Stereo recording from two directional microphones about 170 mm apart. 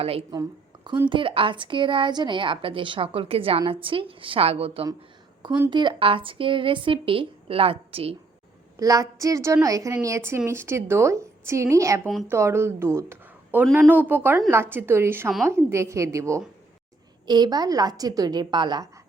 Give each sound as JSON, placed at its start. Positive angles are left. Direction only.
{"t": 0.0, "sound": "a woman's voice", "side_deg": -35}
{"t": 8.8, "sound": "a woman's voice", "side_deg": -20}